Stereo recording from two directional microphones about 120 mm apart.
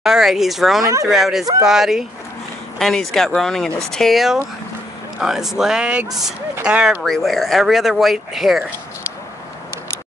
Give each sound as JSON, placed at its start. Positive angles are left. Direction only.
{"t": 0.0, "sound": "speech", "side_deg": -5}
{"t": 0.8, "sound": "speech", "side_deg": -25}
{"t": 1.1, "sound": "speech", "side_deg": 0}